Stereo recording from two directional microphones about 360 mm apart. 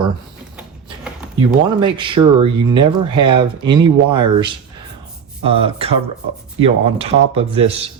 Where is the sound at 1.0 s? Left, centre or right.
Centre.